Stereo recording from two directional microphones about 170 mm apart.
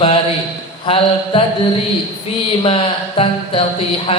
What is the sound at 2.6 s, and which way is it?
A man's voice, 35° left (ahead or behind).